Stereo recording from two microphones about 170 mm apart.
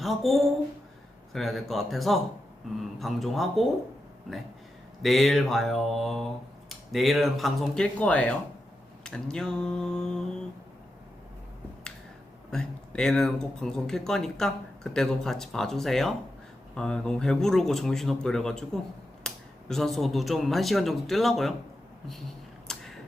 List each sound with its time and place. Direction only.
0.0 s speech: centre (ahead or behind)
5.0 s speech: centre (ahead or behind)
12.5 s speech: 5° left (ahead or behind)
22.7 s a sound: 5° left (ahead or behind)